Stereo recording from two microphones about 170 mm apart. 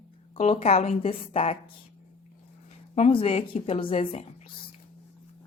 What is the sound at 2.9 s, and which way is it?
A woman's voice, 35° left (ahead or behind).